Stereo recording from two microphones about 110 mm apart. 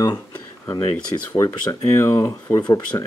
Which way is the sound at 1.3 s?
25° left (ahead or behind).